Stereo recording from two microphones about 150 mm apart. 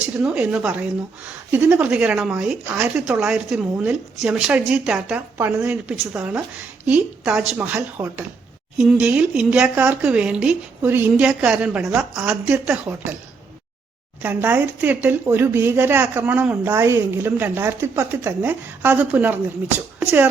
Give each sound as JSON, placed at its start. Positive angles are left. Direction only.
{"t": 0.2, "sound": "speech", "side_deg": -5}
{"t": 14.2, "sound": "speech", "side_deg": -15}